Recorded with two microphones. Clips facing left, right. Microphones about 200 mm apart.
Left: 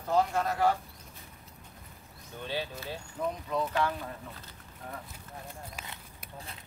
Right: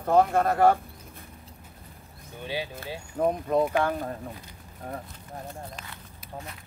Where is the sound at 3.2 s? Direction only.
50° right (ahead or behind).